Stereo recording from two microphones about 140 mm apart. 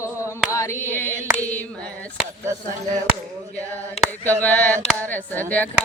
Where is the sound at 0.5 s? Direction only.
20° left (ahead or behind).